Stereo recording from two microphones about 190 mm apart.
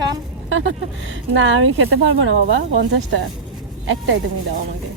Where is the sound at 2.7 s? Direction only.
70° right (ahead or behind).